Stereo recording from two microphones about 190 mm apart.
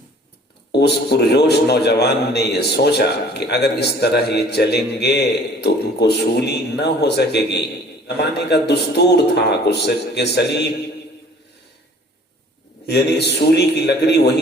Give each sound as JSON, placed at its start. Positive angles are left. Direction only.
{"t": 0.7, "sound": "a man's voice", "side_deg": 60}
{"t": 12.8, "sound": "a man's voice", "side_deg": 60}